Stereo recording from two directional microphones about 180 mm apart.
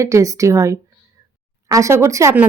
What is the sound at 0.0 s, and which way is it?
Speech, 20° right (ahead or behind).